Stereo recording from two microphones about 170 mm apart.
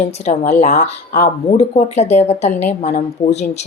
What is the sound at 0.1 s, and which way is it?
Speech, 40° left (ahead or behind).